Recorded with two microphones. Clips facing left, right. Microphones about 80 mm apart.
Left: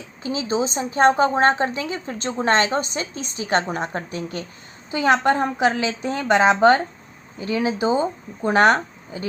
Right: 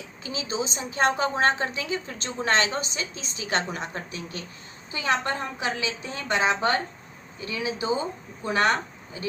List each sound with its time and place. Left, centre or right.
0.2 s a woman's voice: left